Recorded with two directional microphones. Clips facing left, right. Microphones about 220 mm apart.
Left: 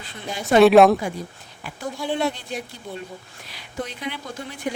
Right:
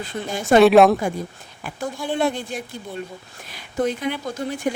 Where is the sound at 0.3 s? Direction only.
50° right (ahead or behind).